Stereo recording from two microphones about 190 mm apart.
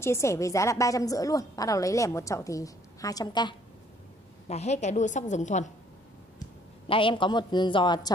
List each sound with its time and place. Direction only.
0.0 s a woman's voice: 15° left (ahead or behind)
4.5 s a woman's voice: 35° left (ahead or behind)
6.9 s a woman's voice: 25° left (ahead or behind)